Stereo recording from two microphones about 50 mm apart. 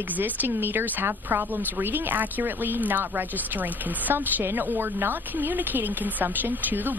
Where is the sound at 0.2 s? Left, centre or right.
Right.